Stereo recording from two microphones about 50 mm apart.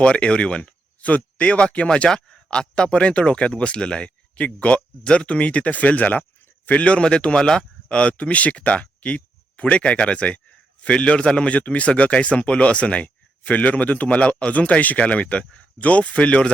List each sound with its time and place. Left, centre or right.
0.0 s speech: left